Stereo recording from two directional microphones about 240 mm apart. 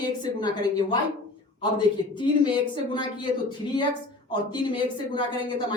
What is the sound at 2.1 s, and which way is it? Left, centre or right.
Speech, centre.